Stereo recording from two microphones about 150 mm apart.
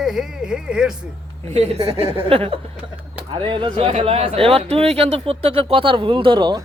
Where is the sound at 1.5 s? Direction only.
45° right (ahead or behind).